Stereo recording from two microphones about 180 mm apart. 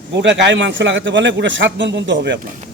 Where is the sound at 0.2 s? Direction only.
80° right.